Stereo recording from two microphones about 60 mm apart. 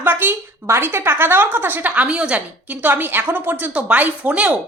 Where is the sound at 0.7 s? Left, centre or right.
Right; by 2.4 s centre.